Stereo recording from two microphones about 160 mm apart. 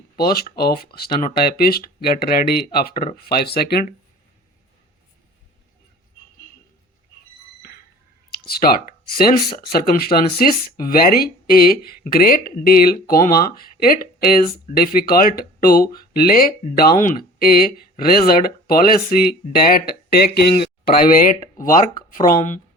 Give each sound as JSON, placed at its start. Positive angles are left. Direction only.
{"t": 0.2, "sound": "speech", "side_deg": 75}
{"t": 3.2, "sound": "speech", "side_deg": 80}
{"t": 8.3, "sound": "speech", "side_deg": 75}
{"t": 20.3, "sound": "speech", "side_deg": 80}